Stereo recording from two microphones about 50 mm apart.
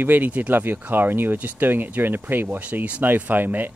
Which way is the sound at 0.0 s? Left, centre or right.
Right.